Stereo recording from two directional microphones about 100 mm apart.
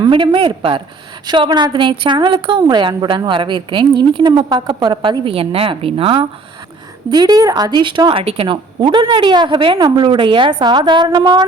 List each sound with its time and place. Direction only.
0.0 s a woman's voice: 50° right (ahead or behind); by 6.2 s 70° right (ahead or behind)
7.1 s a woman's voice: 45° right (ahead or behind)
8.2 s a woman's voice: 75° right (ahead or behind); by 11.4 s 45° right (ahead or behind)